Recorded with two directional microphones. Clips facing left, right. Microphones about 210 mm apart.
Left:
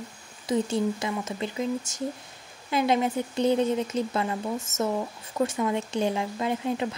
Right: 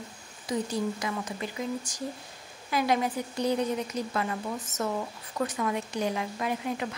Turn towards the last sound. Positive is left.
turn(degrees=25)  # may be behind; listen again after turning